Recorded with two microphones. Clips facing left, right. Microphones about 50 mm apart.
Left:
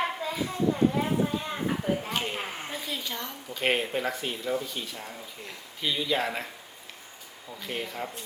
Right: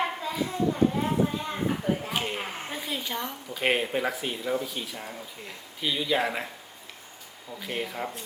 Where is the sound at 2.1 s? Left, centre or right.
Centre.